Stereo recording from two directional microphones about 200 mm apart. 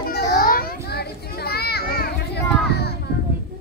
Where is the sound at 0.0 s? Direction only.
50° left (ahead or behind).